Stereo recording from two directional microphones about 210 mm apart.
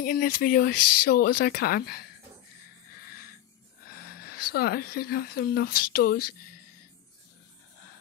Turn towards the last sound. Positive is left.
turn(degrees=45)  # may be behind; listen again after turning